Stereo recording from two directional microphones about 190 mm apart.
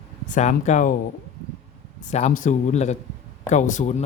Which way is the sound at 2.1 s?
40° left (ahead or behind).